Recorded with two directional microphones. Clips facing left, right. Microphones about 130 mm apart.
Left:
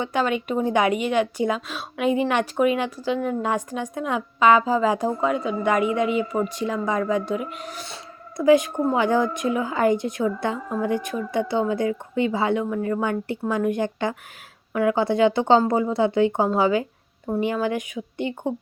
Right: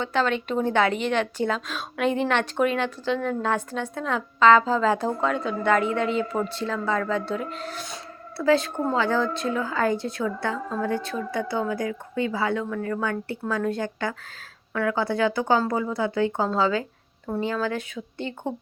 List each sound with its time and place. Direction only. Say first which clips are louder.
0.0 s speech: left 1 dB; 10° left (ahead or behind)